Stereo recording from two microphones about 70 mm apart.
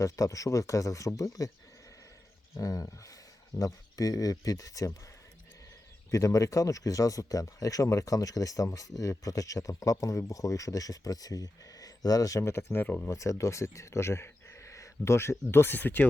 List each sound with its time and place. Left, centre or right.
0.0 s speech: left
2.6 s speech: left
6.1 s speech: left
12.4 s speech: left
13.1 s speech: left